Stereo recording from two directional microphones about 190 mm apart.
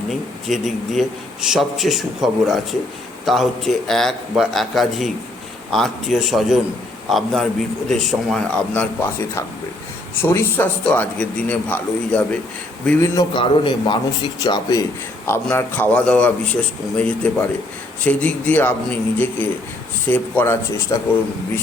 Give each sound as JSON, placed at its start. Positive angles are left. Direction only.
{"t": 0.1, "sound": "a man's voice", "side_deg": 0}
{"t": 13.0, "sound": "speech", "side_deg": 20}